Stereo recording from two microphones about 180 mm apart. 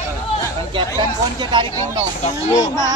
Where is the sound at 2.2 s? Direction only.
35° left (ahead or behind).